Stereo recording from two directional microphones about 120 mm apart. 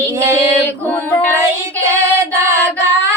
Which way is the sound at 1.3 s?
25° right (ahead or behind).